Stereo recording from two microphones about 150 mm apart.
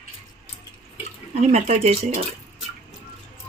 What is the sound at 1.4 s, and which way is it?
Speech, 45° right (ahead or behind).